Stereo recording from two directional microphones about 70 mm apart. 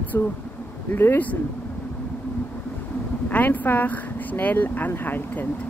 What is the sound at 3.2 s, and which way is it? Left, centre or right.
Speech, left.